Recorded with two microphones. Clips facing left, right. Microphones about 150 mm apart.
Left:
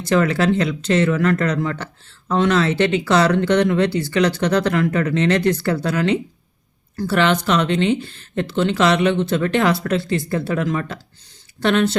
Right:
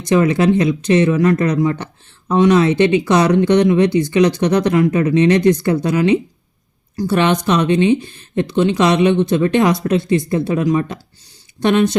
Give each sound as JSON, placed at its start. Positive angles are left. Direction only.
{"t": 0.0, "sound": "speech", "side_deg": -20}